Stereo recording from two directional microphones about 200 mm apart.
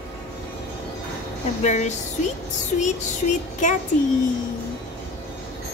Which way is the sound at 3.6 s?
40° left (ahead or behind).